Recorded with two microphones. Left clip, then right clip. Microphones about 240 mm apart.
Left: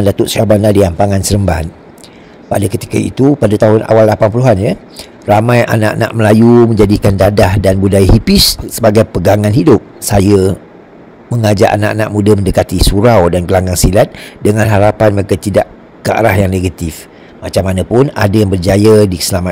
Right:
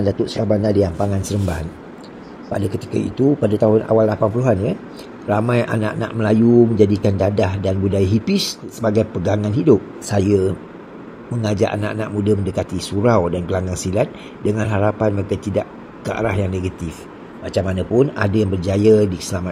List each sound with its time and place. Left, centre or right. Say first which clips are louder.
0.0 s speech: left 9 dB; left